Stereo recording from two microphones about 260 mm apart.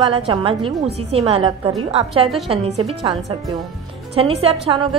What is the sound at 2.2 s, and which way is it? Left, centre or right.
Speech, centre.